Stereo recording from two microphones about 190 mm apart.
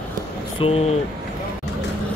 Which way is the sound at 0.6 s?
35° left (ahead or behind).